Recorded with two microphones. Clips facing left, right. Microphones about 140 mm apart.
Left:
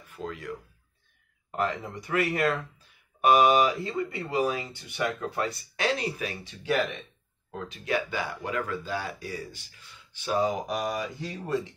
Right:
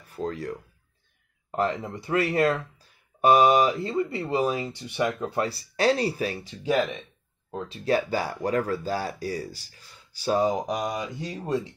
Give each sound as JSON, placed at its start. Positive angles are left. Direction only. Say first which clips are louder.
{"t": 0.0, "sound": "speech", "louder": "right 6 dB", "side_deg": -35}
{"t": 7.5, "sound": "speech", "louder": "right 5 dB", "side_deg": -30}
{"t": 10.7, "sound": "speech", "louder": "right 1 dB", "side_deg": -20}